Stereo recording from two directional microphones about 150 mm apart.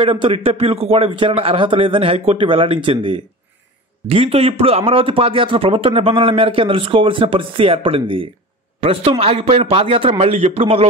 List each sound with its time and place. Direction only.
0.0 s a man's voice: 35° right (ahead or behind)